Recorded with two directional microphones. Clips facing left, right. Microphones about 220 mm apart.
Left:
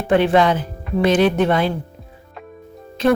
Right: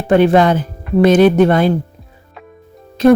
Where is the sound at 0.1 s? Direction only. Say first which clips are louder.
Right 4 dB; 45° right (ahead or behind).